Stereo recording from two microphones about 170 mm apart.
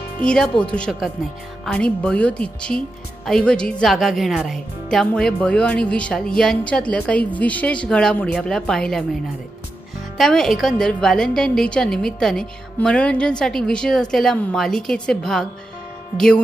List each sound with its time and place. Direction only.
0.2 s a woman's voice: 5° left (ahead or behind)
10.2 s a woman's voice: 5° left (ahead or behind)